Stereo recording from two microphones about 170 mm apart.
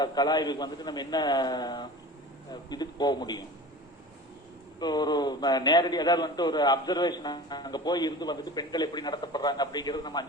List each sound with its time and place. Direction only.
0.0 s a man's voice: 25° left (ahead or behind)
4.8 s a man's voice: 25° left (ahead or behind)